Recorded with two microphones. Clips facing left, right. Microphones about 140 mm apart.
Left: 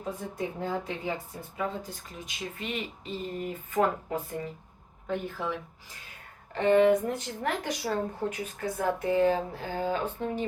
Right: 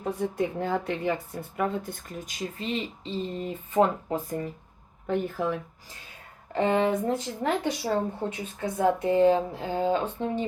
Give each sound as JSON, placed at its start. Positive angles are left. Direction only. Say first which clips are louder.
{"t": 0.0, "sound": "speech", "louder": "right 6 dB", "side_deg": -65}
{"t": 5.0, "sound": "speech", "louder": "right 5 dB", "side_deg": -50}
{"t": 6.5, "sound": "speech", "louder": "left 2 dB", "side_deg": -30}